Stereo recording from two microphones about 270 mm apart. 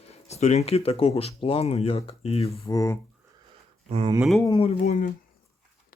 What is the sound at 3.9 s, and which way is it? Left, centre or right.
Speech, centre.